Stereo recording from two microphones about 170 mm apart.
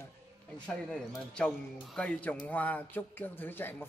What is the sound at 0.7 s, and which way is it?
A man's voice, 5° left (ahead or behind).